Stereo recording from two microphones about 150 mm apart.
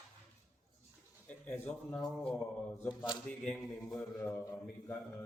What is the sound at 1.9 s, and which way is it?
Speech, 5° left (ahead or behind).